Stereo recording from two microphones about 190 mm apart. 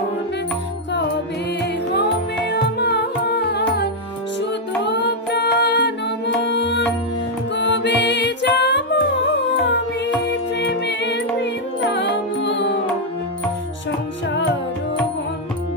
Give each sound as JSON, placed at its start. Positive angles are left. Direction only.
{"t": 2.5, "sound": "carnatic music", "side_deg": 60}
{"t": 4.8, "sound": "music", "side_deg": 65}
{"t": 10.6, "sound": "music", "side_deg": 60}